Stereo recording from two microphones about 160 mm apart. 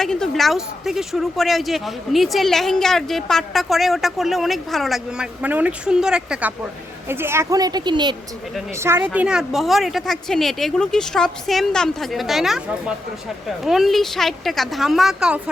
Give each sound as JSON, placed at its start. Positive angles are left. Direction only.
{"t": 0.0, "sound": "a woman's voice", "side_deg": 5}
{"t": 8.7, "sound": "a woman's voice", "side_deg": -15}
{"t": 13.7, "sound": "a woman's voice", "side_deg": 0}